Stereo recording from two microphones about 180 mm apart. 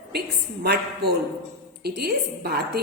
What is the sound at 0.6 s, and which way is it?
A woman's voice, 60° right (ahead or behind).